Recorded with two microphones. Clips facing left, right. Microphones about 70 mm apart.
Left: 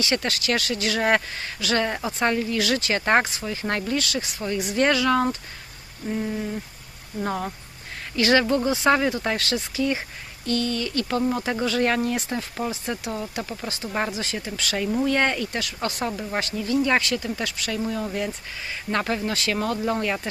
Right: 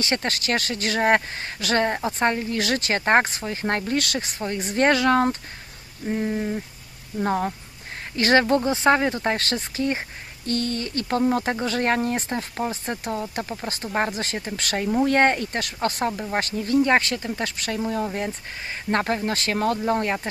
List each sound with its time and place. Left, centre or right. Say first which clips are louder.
0.0 s speech: even; right
3.9 s speech: right 1 dB; right
6.1 s a sound: right 2 dB; right
7.3 s speech: right 5 dB; right
13.7 s speech: right 2 dB; right